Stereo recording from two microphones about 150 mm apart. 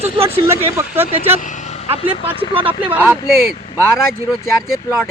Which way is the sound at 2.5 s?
35° right (ahead or behind).